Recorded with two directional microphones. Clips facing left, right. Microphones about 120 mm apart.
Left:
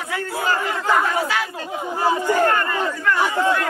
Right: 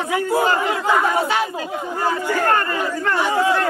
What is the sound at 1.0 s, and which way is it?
Speech, 25° right (ahead or behind).